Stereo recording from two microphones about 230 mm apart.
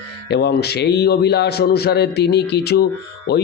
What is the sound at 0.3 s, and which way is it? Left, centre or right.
Speech, left.